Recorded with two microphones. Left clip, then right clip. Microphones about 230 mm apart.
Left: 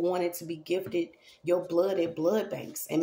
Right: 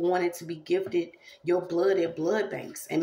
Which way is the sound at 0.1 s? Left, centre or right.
Left.